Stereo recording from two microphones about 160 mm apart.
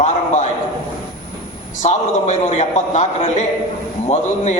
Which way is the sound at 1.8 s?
45° left (ahead or behind).